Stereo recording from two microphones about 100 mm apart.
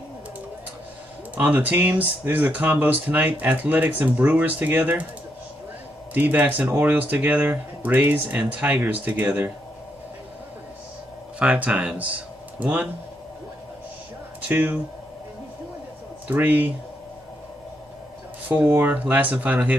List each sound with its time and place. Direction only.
1.5 s speech: 15° right (ahead or behind)
6.1 s speech: 15° right (ahead or behind)
11.3 s speech: 10° right (ahead or behind)
14.5 s speech: 20° right (ahead or behind)
16.3 s speech: 15° right (ahead or behind)
18.6 s speech: 15° right (ahead or behind)